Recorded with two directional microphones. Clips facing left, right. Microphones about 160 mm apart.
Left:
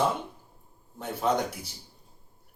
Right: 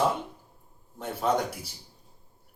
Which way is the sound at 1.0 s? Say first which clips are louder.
Even; centre (ahead or behind).